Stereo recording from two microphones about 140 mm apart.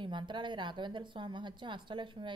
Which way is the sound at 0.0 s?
35° right (ahead or behind).